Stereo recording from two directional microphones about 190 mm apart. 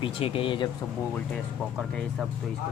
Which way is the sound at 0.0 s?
30° left (ahead or behind).